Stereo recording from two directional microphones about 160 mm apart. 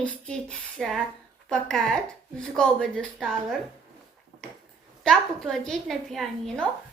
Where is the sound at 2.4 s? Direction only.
5° left (ahead or behind).